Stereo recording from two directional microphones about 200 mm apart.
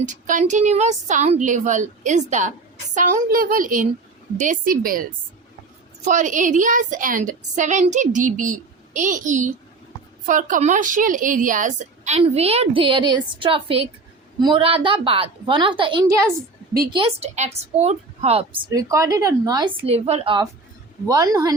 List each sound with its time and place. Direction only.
0.0 s a woman's voice: 40° right (ahead or behind)
6.1 s a woman's voice: 40° right (ahead or behind)
18.7 s a woman's voice: 15° right (ahead or behind)